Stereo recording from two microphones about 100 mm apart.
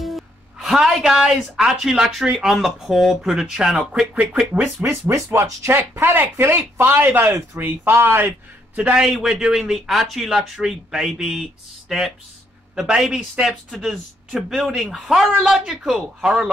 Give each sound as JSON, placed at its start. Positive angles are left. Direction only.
{"t": 0.0, "sound": "a woman's voice", "side_deg": 0}
{"t": 4.8, "sound": "speech", "side_deg": -25}
{"t": 8.7, "sound": "a man's voice", "side_deg": -10}